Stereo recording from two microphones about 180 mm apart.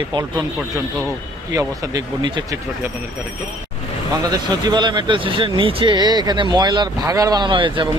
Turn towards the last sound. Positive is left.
turn(degrees=-25)  # may be behind; listen again after turning